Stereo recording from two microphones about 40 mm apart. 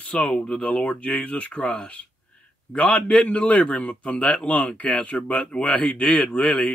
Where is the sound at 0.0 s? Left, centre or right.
Left.